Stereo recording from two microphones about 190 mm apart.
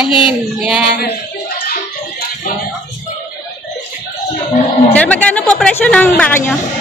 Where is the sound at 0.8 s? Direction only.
60° left (ahead or behind).